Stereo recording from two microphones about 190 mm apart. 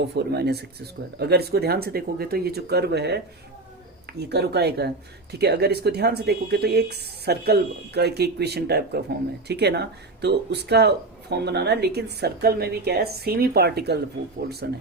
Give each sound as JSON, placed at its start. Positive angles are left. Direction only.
{"t": 0.0, "sound": "speech", "side_deg": -60}
{"t": 4.2, "sound": "speech", "side_deg": -60}